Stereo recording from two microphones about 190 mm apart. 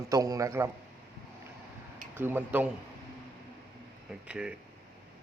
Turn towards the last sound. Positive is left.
turn(degrees=-5)  # may be behind; listen again after turning